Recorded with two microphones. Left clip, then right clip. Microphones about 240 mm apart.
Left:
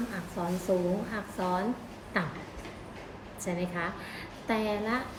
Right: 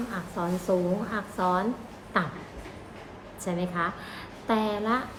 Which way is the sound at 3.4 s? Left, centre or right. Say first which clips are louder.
Right 4 dB; centre.